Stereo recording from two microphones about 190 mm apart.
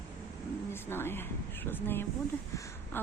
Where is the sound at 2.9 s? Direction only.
10° left (ahead or behind).